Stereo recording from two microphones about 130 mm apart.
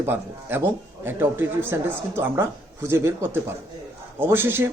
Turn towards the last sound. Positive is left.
turn(degrees=-15)  # may be behind; listen again after turning